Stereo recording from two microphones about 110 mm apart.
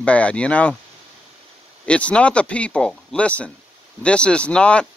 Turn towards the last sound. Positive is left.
turn(degrees=10)  # may be behind; listen again after turning